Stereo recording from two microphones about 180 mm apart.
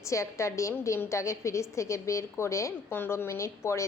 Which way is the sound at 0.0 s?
15° left (ahead or behind).